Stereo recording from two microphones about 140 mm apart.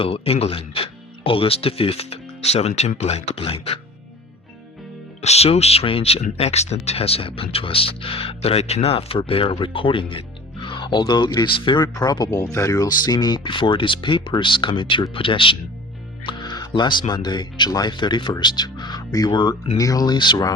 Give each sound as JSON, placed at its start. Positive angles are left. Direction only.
{"t": 0.0, "sound": "speech", "side_deg": 45}
{"t": 5.2, "sound": "speech", "side_deg": 50}